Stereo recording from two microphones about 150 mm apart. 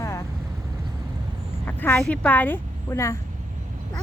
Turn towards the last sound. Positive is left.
turn(degrees=20)  # may be behind; listen again after turning